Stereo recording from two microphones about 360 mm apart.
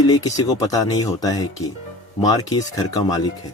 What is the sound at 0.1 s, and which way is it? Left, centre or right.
Speech, centre.